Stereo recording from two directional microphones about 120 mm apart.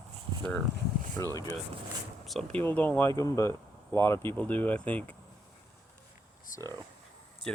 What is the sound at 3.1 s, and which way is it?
Speech, 25° left (ahead or behind).